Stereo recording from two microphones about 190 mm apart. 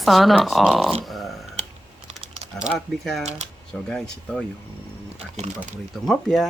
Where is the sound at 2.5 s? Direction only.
5° right (ahead or behind).